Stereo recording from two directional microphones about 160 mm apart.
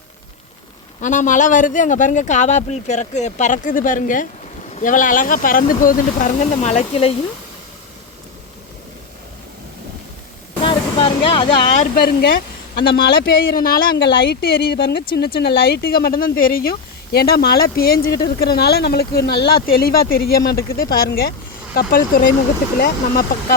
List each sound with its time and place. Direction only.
1.0 s a man's voice: 55° left (ahead or behind)
10.6 s vehicle: 30° left (ahead or behind)
11.9 s speech: 75° left (ahead or behind)
19.6 s speech: 70° left (ahead or behind)